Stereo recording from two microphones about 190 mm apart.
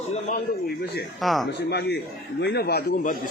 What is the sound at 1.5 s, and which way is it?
A man's voice, 60° left (ahead or behind).